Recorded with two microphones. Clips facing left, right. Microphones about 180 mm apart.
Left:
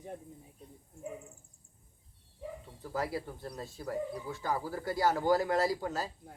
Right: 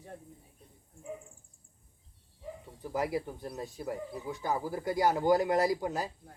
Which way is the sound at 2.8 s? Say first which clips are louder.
Right 3 dB; 20° right (ahead or behind).